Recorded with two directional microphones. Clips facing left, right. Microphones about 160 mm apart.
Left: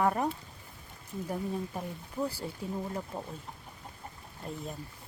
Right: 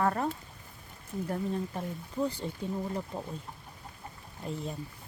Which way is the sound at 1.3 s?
5° left (ahead or behind).